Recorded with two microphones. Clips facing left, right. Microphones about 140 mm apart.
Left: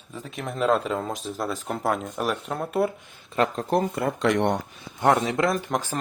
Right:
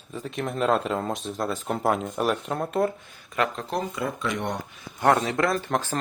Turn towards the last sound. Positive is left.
turn(degrees=15)  # may be behind; listen again after turning